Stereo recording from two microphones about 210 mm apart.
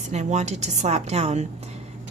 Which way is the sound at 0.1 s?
35° right (ahead or behind).